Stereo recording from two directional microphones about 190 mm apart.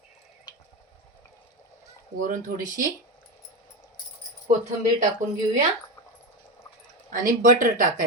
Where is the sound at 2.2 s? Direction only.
45° right (ahead or behind).